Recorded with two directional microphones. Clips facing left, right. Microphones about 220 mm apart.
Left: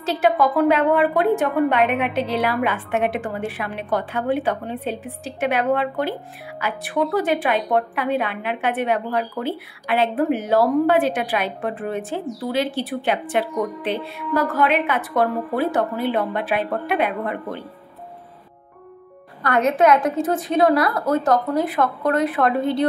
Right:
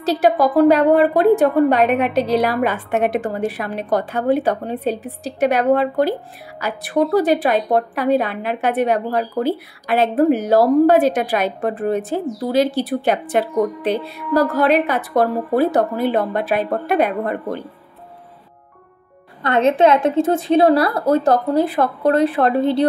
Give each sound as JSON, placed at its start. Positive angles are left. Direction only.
{"t": 0.0, "sound": "a woman's voice", "side_deg": -35}
{"t": 19.4, "sound": "a woman's voice", "side_deg": -25}